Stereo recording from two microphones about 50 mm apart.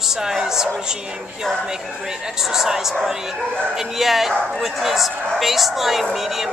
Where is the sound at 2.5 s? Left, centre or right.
Centre.